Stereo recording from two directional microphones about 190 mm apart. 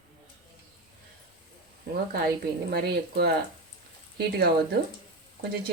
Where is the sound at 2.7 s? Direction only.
60° right (ahead or behind).